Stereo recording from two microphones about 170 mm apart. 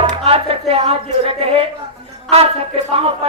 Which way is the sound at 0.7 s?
35° right (ahead or behind).